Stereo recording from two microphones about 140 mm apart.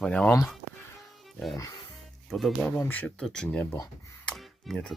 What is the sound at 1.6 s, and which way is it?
Speech, 25° left (ahead or behind).